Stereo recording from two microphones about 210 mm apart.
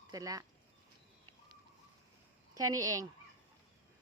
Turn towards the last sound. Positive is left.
turn(degrees=-15)  # may be behind; listen again after turning